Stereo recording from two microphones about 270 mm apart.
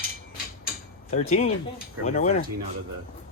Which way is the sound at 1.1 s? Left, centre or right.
Left.